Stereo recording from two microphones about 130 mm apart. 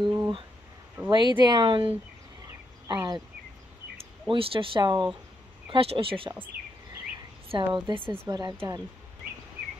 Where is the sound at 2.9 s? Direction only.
35° right (ahead or behind).